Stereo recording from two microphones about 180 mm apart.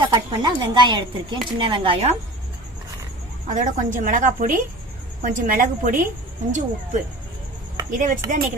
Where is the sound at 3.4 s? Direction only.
45° right (ahead or behind).